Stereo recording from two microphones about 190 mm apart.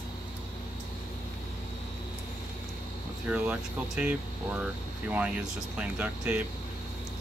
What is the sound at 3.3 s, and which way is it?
Speech, 5° right (ahead or behind).